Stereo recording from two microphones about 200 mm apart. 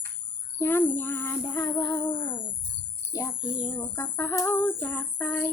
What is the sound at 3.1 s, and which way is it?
Bird, 15° left (ahead or behind).